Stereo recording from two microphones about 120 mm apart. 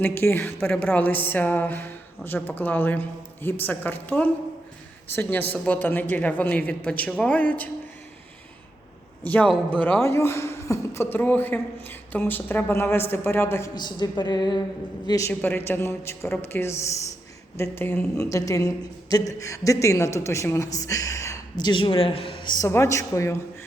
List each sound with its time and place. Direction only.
0.0 s speech: 20° left (ahead or behind)
9.2 s a woman's voice: 15° left (ahead or behind)
13.7 s speech: 35° left (ahead or behind)
15.3 s a woman's voice: 15° left (ahead or behind)
21.6 s a man's voice: 40° left (ahead or behind)
22.6 s a woman's voice: 25° left (ahead or behind)